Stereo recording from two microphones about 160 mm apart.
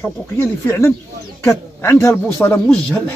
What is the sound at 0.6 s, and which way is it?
Speech, 15° left (ahead or behind).